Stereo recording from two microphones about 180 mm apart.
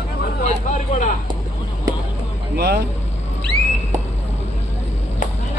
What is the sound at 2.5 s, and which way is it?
Speech, 60° right (ahead or behind).